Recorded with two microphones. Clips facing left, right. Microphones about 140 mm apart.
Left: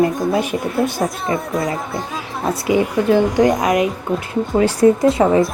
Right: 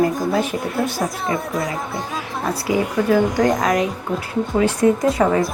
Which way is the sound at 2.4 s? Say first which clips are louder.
Left 4 dB; 25° left (ahead or behind).